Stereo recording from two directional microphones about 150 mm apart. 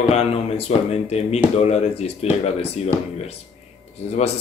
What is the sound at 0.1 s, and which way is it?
Speech, 45° left (ahead or behind).